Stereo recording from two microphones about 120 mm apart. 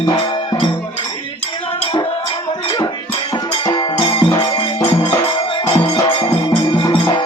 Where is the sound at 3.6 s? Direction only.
40° left (ahead or behind).